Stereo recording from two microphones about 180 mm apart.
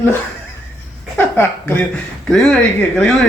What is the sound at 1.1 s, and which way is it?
Speech, 10° left (ahead or behind).